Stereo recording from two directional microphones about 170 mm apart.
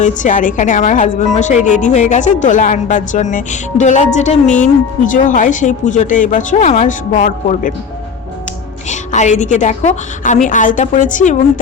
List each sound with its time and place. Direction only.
0.0 s a woman's voice: 50° left (ahead or behind)
8.9 s a woman's voice: 45° left (ahead or behind)